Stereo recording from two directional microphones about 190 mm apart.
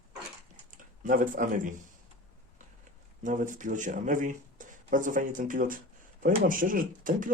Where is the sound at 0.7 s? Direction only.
45° right (ahead or behind).